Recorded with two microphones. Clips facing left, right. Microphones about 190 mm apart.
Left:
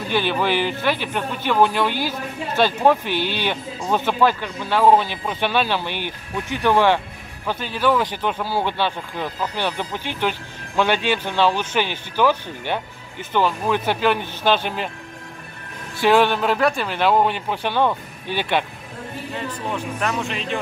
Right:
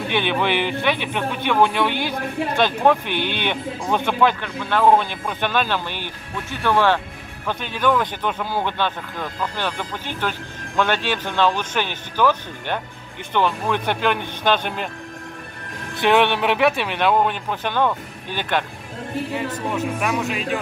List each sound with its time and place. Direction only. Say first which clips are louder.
0.1 s speech: left 1 dB; 5° left (ahead or behind)
3.1 s speech: left 1 dB; 55° right (ahead or behind)
3.4 s speech: even; 5° left (ahead or behind)
16.0 s speech: left 1 dB; centre (ahead or behind)
20.0 s speech: right 2 dB; 5° right (ahead or behind)